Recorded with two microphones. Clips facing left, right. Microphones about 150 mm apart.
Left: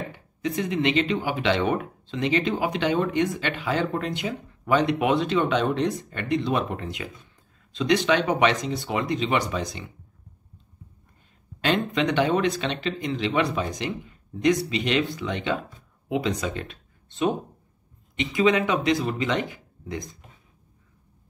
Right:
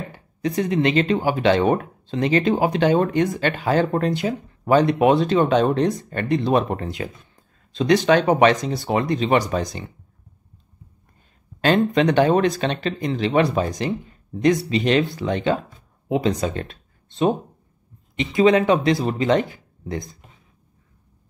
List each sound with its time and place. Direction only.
0.4 s speech: 40° right (ahead or behind)
11.6 s speech: 40° right (ahead or behind)